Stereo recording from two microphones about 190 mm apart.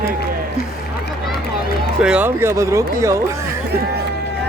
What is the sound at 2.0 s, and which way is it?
Speech, 10° right (ahead or behind).